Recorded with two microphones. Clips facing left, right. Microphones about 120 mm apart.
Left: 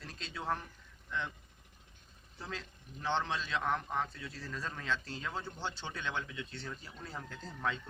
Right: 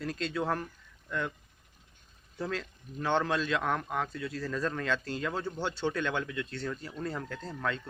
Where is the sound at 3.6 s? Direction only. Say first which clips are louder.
Right 3 dB; 90° right.